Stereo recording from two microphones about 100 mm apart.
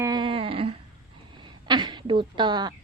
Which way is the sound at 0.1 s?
55° right (ahead or behind).